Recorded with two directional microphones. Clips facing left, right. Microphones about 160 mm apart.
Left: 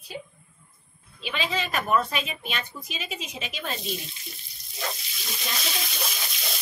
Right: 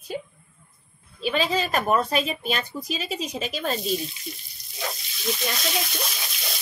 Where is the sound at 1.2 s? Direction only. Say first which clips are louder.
Right 6 dB; 40° right (ahead or behind).